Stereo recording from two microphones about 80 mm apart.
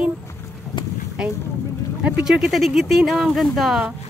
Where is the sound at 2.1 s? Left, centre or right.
Centre.